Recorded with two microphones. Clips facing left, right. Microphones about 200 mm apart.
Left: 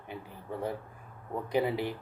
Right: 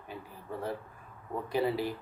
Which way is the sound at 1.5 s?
20° left (ahead or behind).